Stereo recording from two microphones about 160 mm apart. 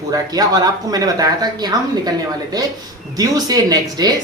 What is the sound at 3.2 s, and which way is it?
Speech, 25° right (ahead or behind).